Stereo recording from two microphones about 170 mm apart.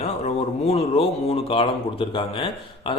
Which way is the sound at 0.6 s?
40° left (ahead or behind).